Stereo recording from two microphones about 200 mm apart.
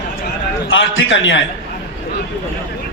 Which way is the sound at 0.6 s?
70° left (ahead or behind).